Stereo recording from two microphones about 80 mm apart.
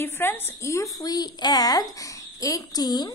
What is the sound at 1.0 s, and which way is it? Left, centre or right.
Speech, left.